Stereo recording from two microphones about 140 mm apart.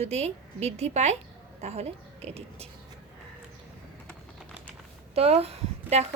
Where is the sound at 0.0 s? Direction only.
50° right (ahead or behind).